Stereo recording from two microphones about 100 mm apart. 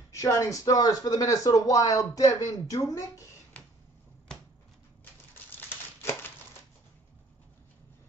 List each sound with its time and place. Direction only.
0.1 s speech: 30° left (ahead or behind)
5.3 s crumpling: 25° left (ahead or behind)